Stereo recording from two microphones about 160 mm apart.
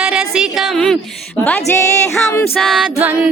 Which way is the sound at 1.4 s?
15° left (ahead or behind).